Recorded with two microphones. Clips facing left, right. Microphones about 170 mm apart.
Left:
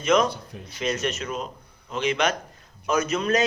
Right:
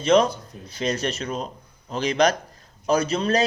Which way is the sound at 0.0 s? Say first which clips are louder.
Right 3 dB; 30° right (ahead or behind).